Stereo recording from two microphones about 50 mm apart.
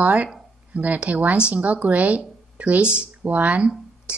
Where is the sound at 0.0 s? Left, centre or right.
Right.